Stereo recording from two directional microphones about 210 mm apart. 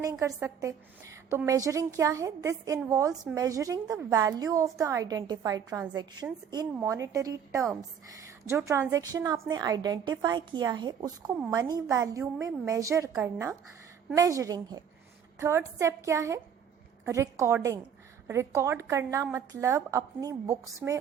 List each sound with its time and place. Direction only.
0.0 s a woman's voice: 15° right (ahead or behind)